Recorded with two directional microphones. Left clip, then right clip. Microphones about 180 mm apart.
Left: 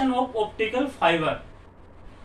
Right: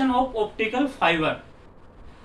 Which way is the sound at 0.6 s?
20° right (ahead or behind).